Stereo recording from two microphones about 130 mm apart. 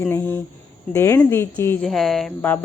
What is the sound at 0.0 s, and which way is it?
Speech, 15° left (ahead or behind).